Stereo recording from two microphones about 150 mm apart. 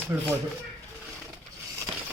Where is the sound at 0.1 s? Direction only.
15° right (ahead or behind).